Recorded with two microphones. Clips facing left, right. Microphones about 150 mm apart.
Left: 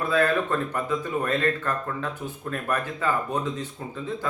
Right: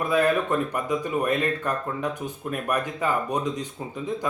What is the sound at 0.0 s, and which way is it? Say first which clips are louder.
Speech: right 1 dB; 15° right (ahead or behind).